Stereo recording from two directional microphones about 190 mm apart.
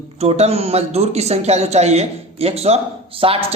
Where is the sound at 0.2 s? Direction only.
35° right (ahead or behind).